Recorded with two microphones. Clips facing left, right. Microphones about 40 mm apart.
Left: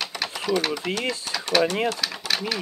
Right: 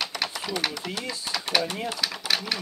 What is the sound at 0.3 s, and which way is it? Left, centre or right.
Chopping, centre.